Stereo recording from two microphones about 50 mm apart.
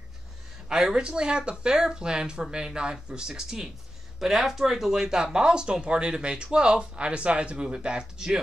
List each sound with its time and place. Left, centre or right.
0.7 s speech: centre